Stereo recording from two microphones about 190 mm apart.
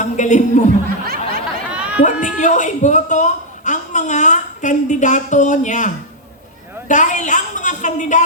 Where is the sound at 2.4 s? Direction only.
40° left (ahead or behind).